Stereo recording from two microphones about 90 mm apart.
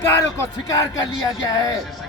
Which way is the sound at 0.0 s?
30° left (ahead or behind).